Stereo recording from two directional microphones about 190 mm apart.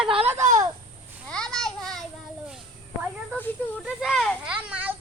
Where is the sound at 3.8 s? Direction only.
Centre (ahead or behind).